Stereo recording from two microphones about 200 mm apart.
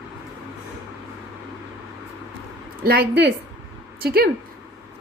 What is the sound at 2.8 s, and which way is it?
A woman's voice, 55° right (ahead or behind).